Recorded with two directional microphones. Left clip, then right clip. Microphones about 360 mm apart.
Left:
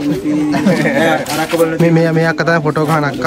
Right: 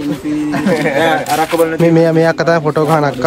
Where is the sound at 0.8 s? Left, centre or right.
Centre.